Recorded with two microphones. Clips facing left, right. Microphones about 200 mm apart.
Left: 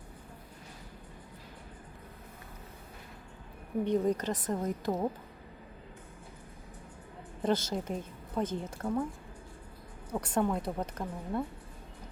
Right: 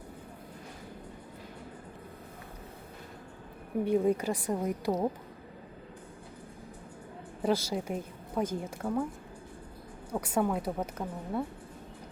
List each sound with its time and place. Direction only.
3.8 s a woman's voice: 10° right (ahead or behind)
7.4 s a woman's voice: 10° right (ahead or behind)
10.1 s a woman's voice: 10° right (ahead or behind)